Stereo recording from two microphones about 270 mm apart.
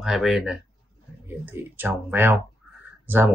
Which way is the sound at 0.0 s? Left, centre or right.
Centre.